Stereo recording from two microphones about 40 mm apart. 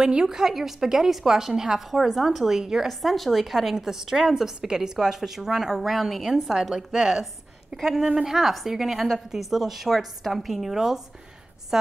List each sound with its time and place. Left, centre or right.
0.0 s a woman's voice: centre
2.9 s a woman's voice: centre